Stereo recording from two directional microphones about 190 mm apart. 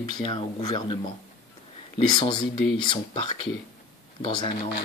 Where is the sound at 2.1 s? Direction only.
25° left (ahead or behind).